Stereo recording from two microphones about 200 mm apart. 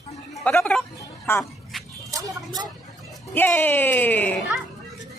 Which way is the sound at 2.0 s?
15° right (ahead or behind).